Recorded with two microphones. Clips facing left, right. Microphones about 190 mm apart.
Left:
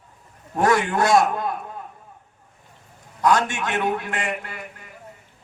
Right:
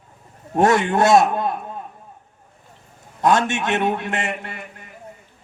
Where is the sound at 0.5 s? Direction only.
25° right (ahead or behind).